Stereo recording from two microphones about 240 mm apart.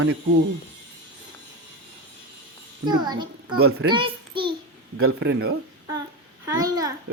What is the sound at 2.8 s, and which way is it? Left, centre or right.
Speech, centre.